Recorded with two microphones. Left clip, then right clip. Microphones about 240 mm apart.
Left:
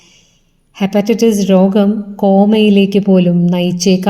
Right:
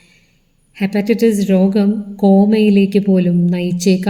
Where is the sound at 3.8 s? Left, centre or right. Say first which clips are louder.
Left 2 dB; left.